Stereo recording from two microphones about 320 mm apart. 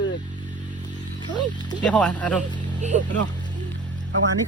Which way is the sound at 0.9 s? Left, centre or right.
Centre.